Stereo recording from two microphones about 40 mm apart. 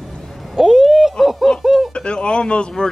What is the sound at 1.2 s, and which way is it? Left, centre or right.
Snicker, centre.